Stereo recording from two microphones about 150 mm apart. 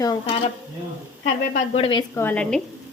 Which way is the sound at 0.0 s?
25° left (ahead or behind).